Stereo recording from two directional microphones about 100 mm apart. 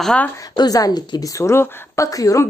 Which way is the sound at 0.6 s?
40° left (ahead or behind).